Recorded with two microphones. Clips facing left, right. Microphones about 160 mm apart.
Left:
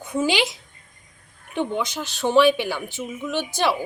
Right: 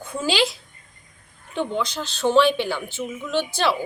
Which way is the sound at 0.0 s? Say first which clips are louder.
Left 1 dB; 20° left (ahead or behind).